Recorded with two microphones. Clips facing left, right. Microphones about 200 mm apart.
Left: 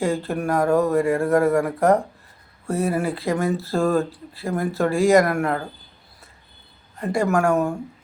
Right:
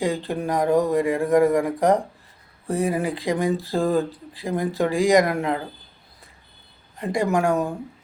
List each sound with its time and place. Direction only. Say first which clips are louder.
0.0 s speech: left 1 dB; 15° right (ahead or behind)
7.0 s speech: left 1 dB; 15° right (ahead or behind)